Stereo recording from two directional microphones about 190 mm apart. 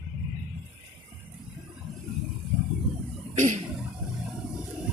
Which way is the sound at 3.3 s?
40° right (ahead or behind).